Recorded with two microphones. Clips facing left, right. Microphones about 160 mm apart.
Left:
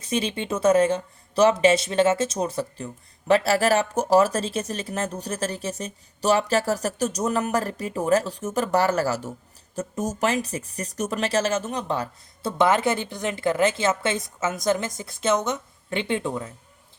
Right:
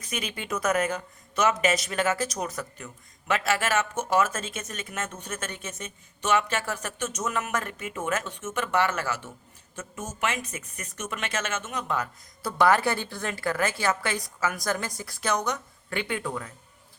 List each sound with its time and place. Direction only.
0.0 s speech: 30° left (ahead or behind)